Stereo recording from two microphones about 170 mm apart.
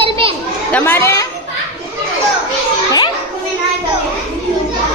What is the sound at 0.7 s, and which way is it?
Speech, 10° left (ahead or behind).